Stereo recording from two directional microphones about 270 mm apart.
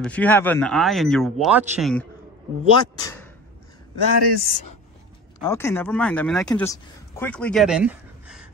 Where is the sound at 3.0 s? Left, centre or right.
Centre.